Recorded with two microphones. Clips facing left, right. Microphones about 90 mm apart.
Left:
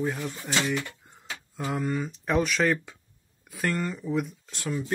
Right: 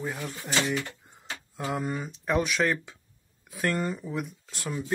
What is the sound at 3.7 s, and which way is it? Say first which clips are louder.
Speech: right 1 dB; 15° right (ahead or behind).